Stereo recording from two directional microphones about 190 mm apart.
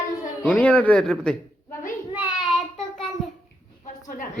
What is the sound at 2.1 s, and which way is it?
Child singing, 10° right (ahead or behind).